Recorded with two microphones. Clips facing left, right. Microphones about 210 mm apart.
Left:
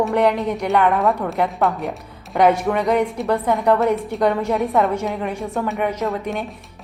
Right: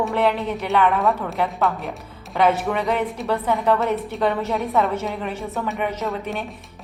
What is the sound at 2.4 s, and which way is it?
A woman's voice, 15° left (ahead or behind).